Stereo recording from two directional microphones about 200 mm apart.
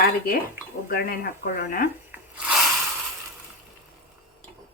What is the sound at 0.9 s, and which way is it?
Speech, 50° left (ahead or behind).